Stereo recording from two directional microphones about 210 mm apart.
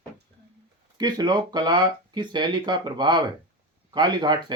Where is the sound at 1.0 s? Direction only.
20° right (ahead or behind).